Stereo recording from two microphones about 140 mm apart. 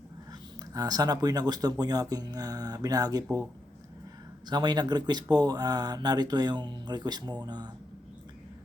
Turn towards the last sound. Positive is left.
turn(degrees=-30)  # may be behind; listen again after turning